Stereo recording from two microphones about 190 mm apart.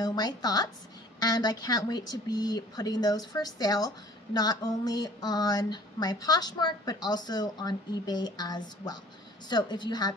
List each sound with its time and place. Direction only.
0.0 s speech: 20° left (ahead or behind)